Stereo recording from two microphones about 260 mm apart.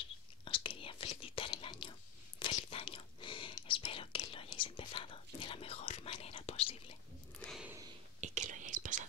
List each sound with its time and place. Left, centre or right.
0.5 s whispering: centre
7.3 s a sound: centre
8.2 s whispering: right